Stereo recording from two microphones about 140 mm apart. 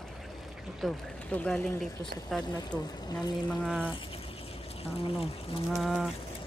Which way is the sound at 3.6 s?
5° right (ahead or behind).